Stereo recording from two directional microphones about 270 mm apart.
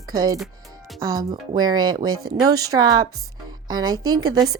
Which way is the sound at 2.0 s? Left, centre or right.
Right.